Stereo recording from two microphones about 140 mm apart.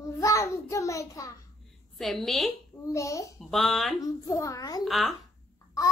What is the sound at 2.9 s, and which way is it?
Speech, 20° left (ahead or behind).